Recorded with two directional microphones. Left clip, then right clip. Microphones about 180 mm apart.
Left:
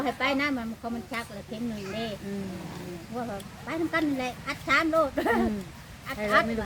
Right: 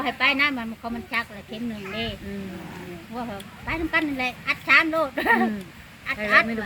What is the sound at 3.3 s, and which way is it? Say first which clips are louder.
Speech: right 4 dB; 15° right (ahead or behind).